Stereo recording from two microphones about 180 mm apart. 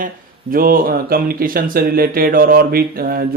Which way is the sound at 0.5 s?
50° right (ahead or behind).